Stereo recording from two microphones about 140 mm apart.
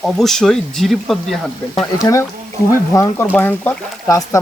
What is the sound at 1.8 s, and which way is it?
Speech, 20° left (ahead or behind).